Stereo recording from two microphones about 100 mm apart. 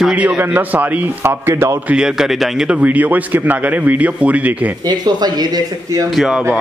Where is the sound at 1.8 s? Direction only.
10° right (ahead or behind).